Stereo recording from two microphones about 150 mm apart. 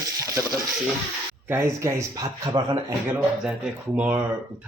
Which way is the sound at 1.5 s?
15° right (ahead or behind).